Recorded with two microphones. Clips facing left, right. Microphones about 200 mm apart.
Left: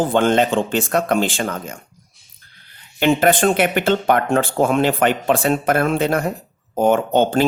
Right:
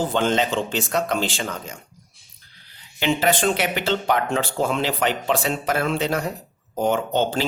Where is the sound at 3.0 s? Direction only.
55° left (ahead or behind).